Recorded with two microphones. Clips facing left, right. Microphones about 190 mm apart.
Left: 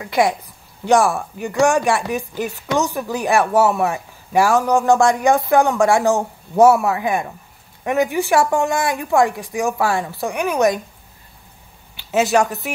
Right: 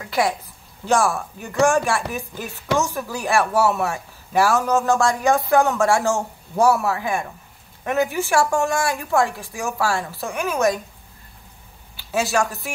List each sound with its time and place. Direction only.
0.0 s a man's voice: 15° left (ahead or behind)
12.1 s a man's voice: 20° left (ahead or behind)